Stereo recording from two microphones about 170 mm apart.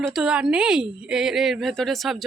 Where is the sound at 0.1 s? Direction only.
5° right (ahead or behind).